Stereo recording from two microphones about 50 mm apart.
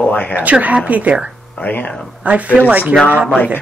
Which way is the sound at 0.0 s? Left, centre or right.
Left.